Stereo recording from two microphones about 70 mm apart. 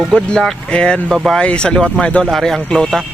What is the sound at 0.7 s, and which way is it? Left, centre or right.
Speech, centre.